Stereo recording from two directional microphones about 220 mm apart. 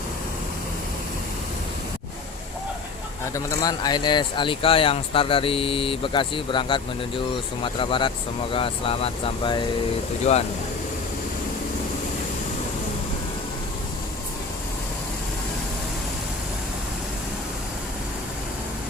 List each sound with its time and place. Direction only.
3.3 s speech: 15° left (ahead or behind)